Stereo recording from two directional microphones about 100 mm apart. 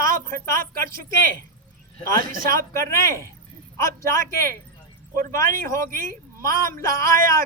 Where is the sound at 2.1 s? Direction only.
30° left (ahead or behind).